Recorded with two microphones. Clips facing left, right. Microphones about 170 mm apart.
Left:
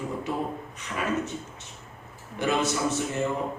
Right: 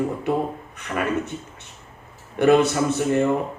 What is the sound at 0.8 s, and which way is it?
Speech, 60° right (ahead or behind).